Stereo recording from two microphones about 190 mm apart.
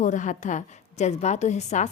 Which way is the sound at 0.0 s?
40° left (ahead or behind).